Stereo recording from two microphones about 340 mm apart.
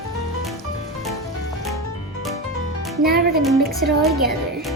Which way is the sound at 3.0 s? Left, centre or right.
Right.